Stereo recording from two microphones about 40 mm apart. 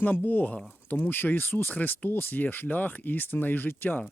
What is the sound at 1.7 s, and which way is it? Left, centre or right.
Speech, left.